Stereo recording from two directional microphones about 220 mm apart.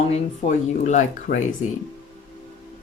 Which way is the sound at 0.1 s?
35° left (ahead or behind).